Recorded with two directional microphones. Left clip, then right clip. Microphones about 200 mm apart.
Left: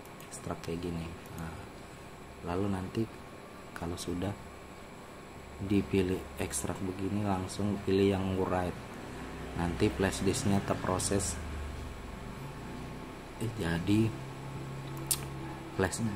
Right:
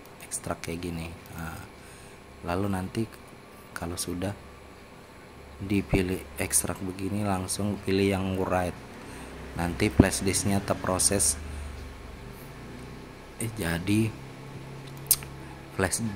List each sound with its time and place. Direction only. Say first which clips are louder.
0.5 s speech: right 4 dB; 20° right (ahead or behind)
2.4 s speech: right 5 dB; 20° right (ahead or behind)
5.7 s speech: right 3 dB; 10° right (ahead or behind)
13.6 s speech: right 3 dB; 15° right (ahead or behind)
15.1 s a sound: right 6 dB; 10° right (ahead or behind)
15.8 s speech: right 4 dB; 10° right (ahead or behind)